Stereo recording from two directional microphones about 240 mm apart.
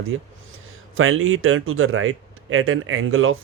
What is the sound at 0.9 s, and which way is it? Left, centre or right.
Speech, right.